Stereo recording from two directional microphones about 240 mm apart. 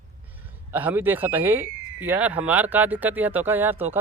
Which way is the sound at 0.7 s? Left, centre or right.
Centre.